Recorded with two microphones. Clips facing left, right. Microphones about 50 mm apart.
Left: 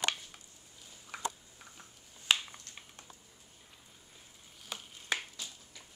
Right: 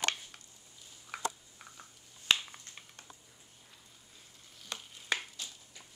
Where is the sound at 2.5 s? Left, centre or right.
Centre.